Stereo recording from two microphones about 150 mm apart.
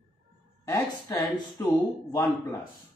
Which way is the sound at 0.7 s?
20° left (ahead or behind).